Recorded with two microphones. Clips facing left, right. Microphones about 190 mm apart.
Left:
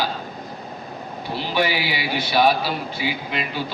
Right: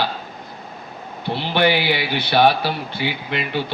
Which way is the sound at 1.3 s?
65° right (ahead or behind).